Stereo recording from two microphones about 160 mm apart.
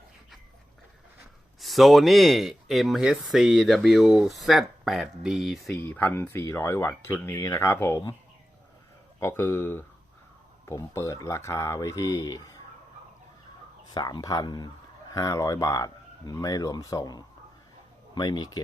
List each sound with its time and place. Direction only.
1.6 s speech: centre (ahead or behind)
5.7 s speech: 10° left (ahead or behind)
9.2 s speech: 15° left (ahead or behind)
13.9 s speech: 25° left (ahead or behind)